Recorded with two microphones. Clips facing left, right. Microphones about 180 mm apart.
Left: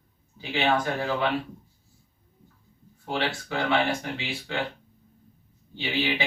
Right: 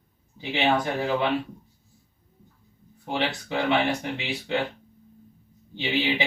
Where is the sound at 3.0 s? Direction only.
20° right (ahead or behind).